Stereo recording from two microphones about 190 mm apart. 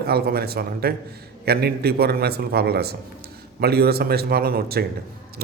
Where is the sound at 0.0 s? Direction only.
55° right (ahead or behind).